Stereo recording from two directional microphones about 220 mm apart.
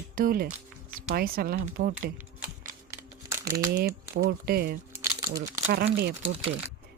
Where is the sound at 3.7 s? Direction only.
45° right (ahead or behind).